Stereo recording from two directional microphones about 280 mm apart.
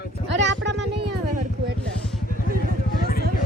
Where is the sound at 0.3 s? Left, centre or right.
Right.